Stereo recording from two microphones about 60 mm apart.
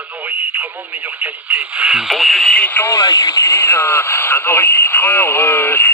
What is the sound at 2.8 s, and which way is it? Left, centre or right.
Speech, left.